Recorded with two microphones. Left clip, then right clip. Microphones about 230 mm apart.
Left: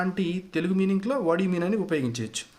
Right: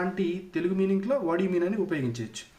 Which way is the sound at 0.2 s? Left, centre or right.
Left.